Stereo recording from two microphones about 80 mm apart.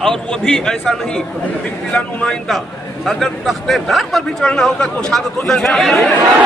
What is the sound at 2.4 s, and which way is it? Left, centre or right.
A man's voice, centre.